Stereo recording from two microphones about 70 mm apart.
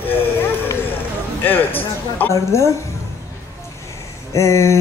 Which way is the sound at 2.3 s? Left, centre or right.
Left.